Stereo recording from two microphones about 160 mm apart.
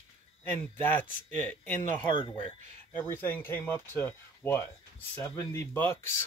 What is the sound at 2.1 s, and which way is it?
Speech, 30° left (ahead or behind).